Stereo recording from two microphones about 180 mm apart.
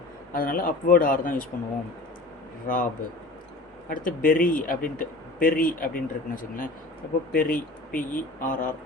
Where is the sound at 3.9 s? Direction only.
50° left (ahead or behind).